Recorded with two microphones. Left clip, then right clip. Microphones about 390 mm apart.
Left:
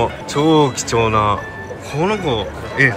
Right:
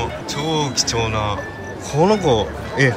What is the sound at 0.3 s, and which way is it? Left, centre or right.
Speech, centre.